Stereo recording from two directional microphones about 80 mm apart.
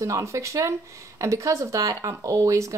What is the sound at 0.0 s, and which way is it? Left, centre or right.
Speech, right.